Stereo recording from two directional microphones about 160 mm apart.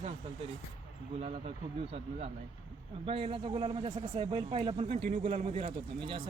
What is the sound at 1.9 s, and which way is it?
Speech, 40° right (ahead or behind).